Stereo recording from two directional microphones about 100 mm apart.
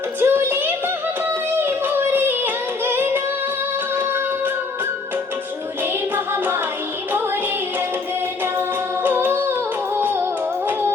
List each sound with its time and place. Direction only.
0.2 s a sound: 20° right (ahead or behind)
1.2 s music: 20° right (ahead or behind)
5.8 s music: 20° right (ahead or behind)
9.0 s humming: 20° right (ahead or behind)